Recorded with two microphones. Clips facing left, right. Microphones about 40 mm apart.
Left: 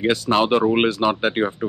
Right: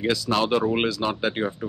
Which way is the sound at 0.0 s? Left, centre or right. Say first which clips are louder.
Left 4 dB; left.